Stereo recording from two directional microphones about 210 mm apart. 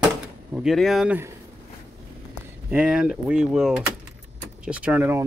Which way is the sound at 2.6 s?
5° right (ahead or behind).